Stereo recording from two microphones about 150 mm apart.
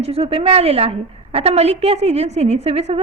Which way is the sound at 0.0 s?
40° right (ahead or behind).